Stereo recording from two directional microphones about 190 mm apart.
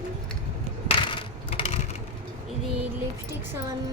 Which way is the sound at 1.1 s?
25° left (ahead or behind).